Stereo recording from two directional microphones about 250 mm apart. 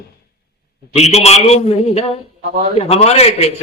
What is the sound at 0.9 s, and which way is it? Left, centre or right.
A man's voice, left.